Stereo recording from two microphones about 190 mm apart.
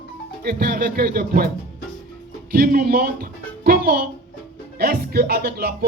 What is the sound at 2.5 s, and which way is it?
A child's voice, 50° right (ahead or behind).